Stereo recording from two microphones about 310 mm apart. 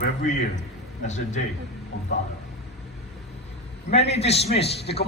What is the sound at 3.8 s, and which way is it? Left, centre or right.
A man's voice, centre.